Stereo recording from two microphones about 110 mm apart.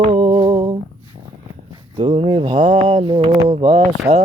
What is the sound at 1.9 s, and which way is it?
Mantra, 50° right (ahead or behind).